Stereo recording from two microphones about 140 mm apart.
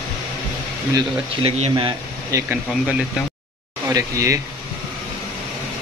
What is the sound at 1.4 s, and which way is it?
Speech, 40° right (ahead or behind).